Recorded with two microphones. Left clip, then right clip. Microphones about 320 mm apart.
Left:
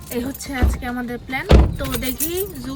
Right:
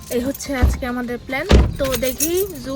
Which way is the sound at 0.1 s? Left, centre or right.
Centre.